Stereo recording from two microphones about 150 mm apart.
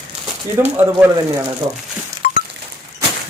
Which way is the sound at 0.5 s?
15° right (ahead or behind).